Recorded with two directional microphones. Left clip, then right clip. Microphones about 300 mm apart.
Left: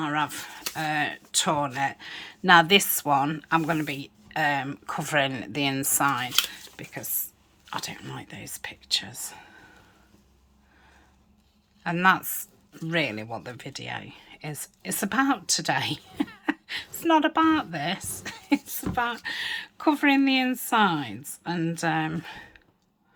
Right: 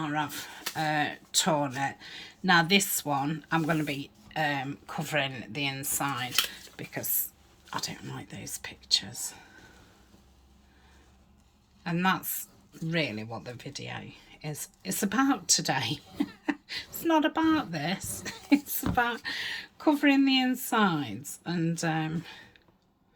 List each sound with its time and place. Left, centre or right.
0.0 s a woman's voice: centre
11.8 s a woman's voice: centre